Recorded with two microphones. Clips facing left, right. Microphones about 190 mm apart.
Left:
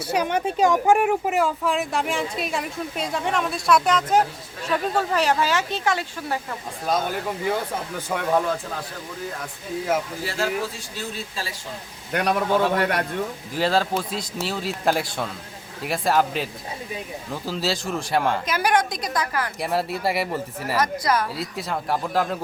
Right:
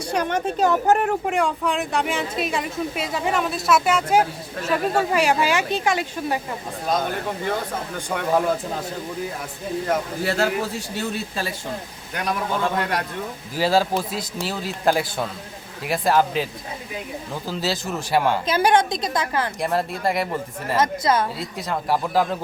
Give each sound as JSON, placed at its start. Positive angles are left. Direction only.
{"t": 0.0, "sound": "speech", "side_deg": 10}
{"t": 6.8, "sound": "speech", "side_deg": 5}
{"t": 10.2, "sound": "speech", "side_deg": -65}
{"t": 12.1, "sound": "a man's voice", "side_deg": 60}
{"t": 13.5, "sound": "speech", "side_deg": -5}
{"t": 18.4, "sound": "a woman's voice", "side_deg": -25}
{"t": 19.5, "sound": "speech", "side_deg": 5}
{"t": 20.7, "sound": "a woman's voice", "side_deg": -25}
{"t": 21.3, "sound": "speech", "side_deg": 0}